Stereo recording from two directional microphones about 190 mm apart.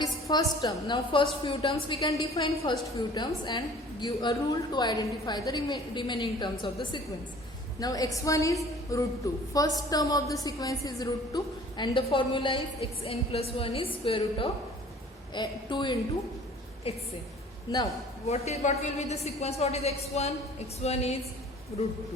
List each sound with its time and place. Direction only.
0.0 s a woman's voice: 20° left (ahead or behind)
7.8 s a woman's voice: 20° left (ahead or behind)
18.3 s a woman's voice: 35° left (ahead or behind)